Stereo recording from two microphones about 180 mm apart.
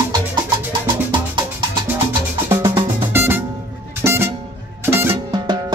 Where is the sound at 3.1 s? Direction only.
10° right (ahead or behind).